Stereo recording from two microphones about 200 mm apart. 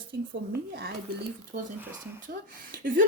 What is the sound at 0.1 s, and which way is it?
Speech, 55° right (ahead or behind).